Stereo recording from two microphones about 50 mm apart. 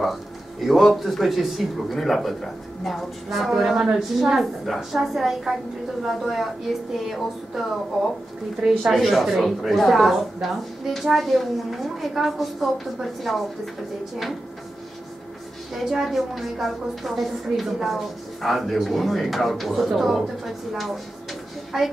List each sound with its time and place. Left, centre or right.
0.0 s a woman's voice: centre
15.7 s a woman's voice: centre